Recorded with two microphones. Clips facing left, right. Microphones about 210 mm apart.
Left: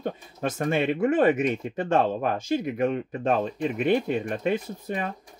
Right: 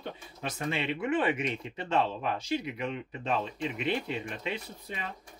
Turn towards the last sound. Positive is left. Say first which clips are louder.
# left 9 dB
turn(degrees=50)  # may be behind; listen again after turning